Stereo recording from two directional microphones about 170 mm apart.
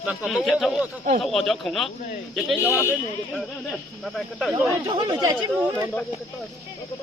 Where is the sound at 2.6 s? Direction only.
15° left (ahead or behind).